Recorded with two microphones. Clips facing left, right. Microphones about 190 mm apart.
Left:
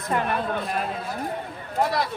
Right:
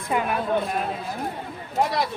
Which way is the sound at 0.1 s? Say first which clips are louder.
Right 2 dB; 5° right (ahead or behind).